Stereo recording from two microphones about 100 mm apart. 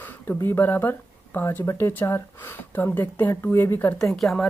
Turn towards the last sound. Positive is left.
turn(degrees=5)  # may be behind; listen again after turning